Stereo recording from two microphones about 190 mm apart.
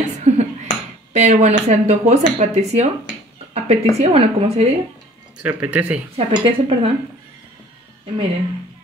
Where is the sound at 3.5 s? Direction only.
35° right (ahead or behind).